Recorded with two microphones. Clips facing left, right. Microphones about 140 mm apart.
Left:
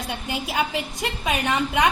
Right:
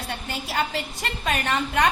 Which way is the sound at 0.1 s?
15° left (ahead or behind).